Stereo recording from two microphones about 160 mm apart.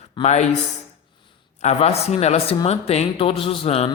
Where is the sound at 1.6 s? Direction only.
45° left (ahead or behind).